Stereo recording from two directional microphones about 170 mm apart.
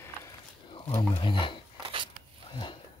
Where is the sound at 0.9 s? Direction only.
30° left (ahead or behind).